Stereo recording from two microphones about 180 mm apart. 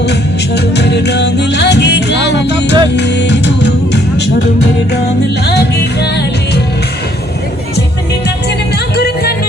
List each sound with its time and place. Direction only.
0.0 s music: 70° left (ahead or behind)
5.5 s music: 65° left (ahead or behind)
9.0 s music: 60° left (ahead or behind)